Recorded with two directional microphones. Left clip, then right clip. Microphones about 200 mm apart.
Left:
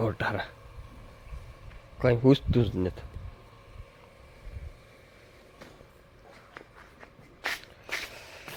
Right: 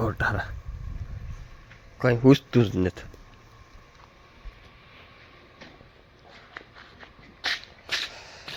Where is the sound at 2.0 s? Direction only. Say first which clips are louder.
Right 3 dB; 5° right (ahead or behind).